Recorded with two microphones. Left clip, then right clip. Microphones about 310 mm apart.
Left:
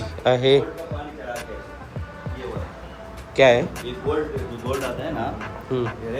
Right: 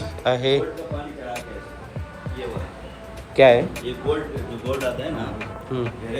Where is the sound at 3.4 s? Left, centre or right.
Centre.